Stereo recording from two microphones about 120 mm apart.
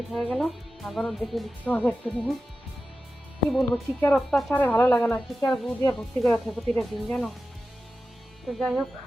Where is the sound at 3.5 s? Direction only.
Centre (ahead or behind).